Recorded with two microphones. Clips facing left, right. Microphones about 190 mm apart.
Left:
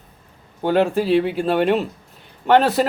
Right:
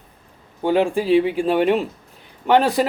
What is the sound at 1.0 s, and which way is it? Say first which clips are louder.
Speech: right 1 dB; 10° right (ahead or behind).